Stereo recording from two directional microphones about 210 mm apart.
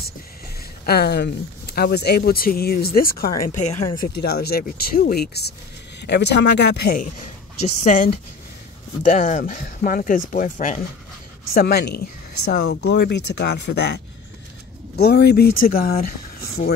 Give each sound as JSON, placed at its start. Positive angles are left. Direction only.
{"t": 0.8, "sound": "speech", "side_deg": 50}
{"t": 4.1, "sound": "speech", "side_deg": 50}
{"t": 7.6, "sound": "speech", "side_deg": 35}
{"t": 11.5, "sound": "speech", "side_deg": 50}